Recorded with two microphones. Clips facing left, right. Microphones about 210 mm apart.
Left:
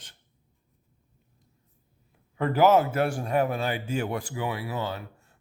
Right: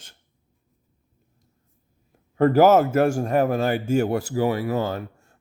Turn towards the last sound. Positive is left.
turn(degrees=-45)  # may be behind; listen again after turning